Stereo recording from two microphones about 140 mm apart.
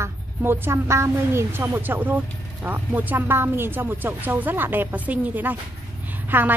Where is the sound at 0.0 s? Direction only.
15° right (ahead or behind).